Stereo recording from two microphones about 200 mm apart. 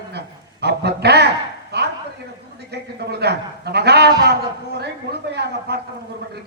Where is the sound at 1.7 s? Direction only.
55° right (ahead or behind).